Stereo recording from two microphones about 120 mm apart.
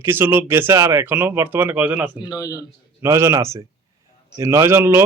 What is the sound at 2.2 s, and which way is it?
Speech, 30° left (ahead or behind).